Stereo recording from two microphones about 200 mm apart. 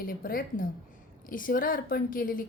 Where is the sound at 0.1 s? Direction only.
45° left (ahead or behind).